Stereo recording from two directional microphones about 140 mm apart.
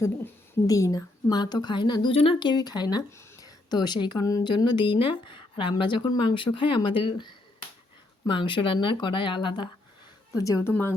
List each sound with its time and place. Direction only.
0.7 s a woman's voice: 25° left (ahead or behind)